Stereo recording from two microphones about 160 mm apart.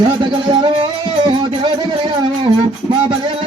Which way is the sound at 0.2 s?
35° right (ahead or behind).